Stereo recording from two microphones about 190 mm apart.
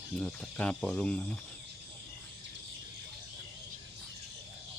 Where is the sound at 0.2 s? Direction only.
5° left (ahead or behind).